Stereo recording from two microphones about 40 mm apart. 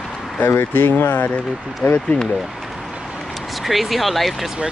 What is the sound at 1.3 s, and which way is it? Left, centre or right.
Speech, left.